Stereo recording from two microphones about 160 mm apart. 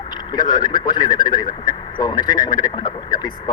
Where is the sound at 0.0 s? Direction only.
25° left (ahead or behind).